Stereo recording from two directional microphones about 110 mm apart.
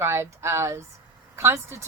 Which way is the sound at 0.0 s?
25° right (ahead or behind).